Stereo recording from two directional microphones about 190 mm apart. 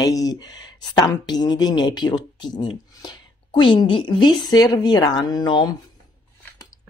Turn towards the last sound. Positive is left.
turn(degrees=20)  # may be behind; listen again after turning